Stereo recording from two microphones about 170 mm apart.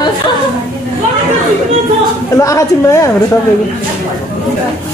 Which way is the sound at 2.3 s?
20° left (ahead or behind).